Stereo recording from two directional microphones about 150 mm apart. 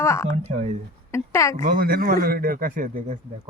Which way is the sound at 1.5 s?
60° right (ahead or behind).